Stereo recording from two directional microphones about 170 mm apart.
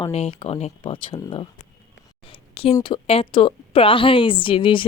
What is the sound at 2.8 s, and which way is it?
A woman's voice, 30° left (ahead or behind).